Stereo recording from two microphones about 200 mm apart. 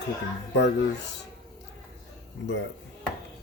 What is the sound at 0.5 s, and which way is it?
Speech, 60° left (ahead or behind).